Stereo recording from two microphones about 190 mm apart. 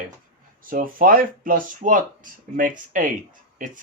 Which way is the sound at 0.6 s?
45° right (ahead or behind).